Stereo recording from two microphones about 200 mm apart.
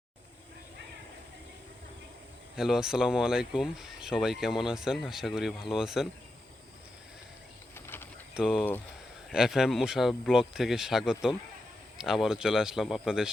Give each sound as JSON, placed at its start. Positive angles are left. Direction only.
{"t": 2.6, "sound": "speech", "side_deg": -5}
{"t": 8.4, "sound": "speech", "side_deg": -5}